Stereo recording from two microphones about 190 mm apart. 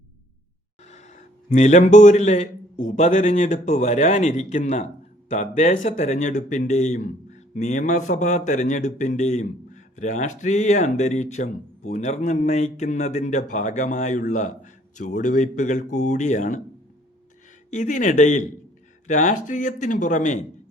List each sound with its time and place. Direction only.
0.9 s a man's voice: 40° left (ahead or behind)
17.7 s speech: 40° left (ahead or behind)